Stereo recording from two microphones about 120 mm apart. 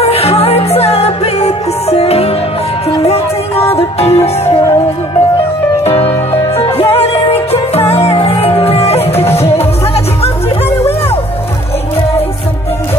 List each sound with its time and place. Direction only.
0.0 s music: 60° left (ahead or behind)
5.9 s music: 55° left (ahead or behind)